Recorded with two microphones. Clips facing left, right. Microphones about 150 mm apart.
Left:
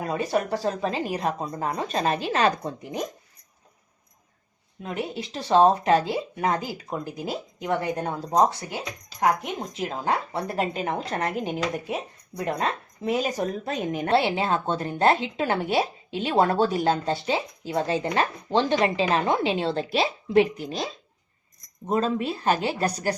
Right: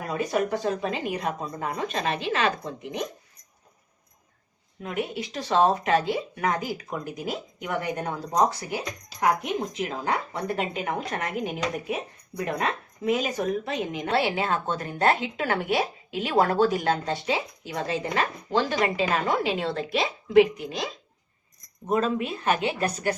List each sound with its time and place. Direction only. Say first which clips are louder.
0.0 s a woman's voice: left 1 dB; 30° left (ahead or behind)
4.8 s a woman's voice: right 1 dB; 30° left (ahead or behind)
9.8 s a woman's voice: left 2 dB; 35° left (ahead or behind)
13.1 s a woman's voice: even; 35° left (ahead or behind)